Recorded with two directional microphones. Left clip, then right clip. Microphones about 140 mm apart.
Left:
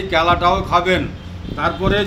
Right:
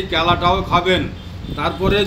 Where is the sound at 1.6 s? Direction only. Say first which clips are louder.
Even; 20° left (ahead or behind).